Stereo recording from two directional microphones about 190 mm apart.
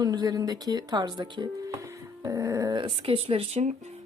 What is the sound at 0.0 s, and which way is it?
Speech, 20° right (ahead or behind).